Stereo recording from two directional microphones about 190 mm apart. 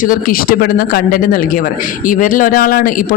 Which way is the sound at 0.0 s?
50° left (ahead or behind).